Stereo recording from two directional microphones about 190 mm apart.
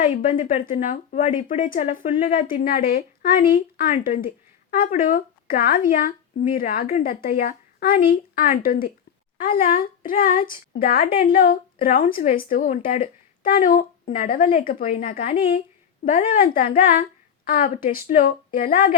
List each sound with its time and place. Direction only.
0.0 s speech: 45° left (ahead or behind)